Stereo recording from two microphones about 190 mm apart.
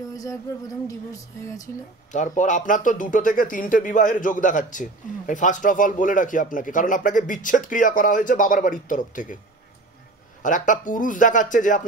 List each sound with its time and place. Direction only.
0.1 s a sound: 20° left (ahead or behind)
0.8 s speech: 15° left (ahead or behind)
2.1 s speech: 40° left (ahead or behind)
10.4 s speech: 40° left (ahead or behind)